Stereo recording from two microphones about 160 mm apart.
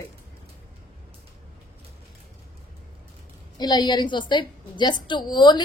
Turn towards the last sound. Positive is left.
turn(degrees=30)  # may be behind; listen again after turning